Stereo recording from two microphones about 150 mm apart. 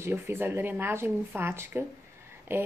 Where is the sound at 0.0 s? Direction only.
15° right (ahead or behind).